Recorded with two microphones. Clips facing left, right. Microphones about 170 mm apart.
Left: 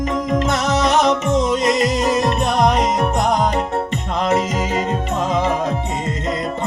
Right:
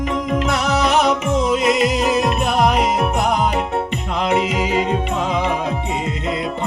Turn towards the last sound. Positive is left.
turn(degrees=0)  # may be behind; listen again after turning